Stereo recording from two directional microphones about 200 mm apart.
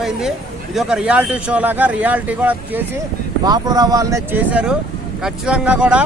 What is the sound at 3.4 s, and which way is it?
A man's voice, 20° right (ahead or behind).